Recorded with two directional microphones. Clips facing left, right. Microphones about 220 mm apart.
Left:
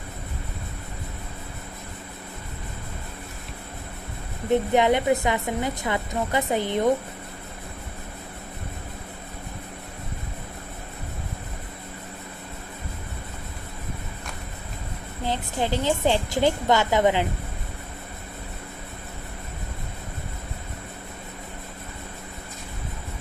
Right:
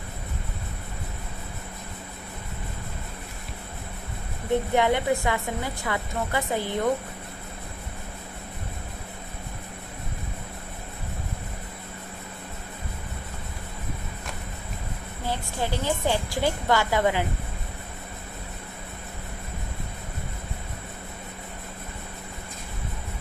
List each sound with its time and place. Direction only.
4.7 s a woman's voice: 20° left (ahead or behind)
15.3 s a woman's voice: 20° left (ahead or behind)